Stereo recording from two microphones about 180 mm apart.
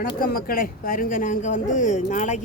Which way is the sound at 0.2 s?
55° left (ahead or behind).